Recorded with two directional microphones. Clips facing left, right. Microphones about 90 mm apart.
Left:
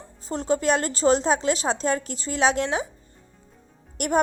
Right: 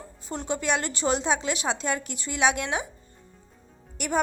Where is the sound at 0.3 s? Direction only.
35° left (ahead or behind).